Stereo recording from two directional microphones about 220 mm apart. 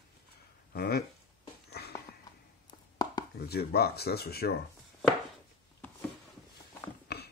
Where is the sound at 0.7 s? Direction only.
45° left (ahead or behind).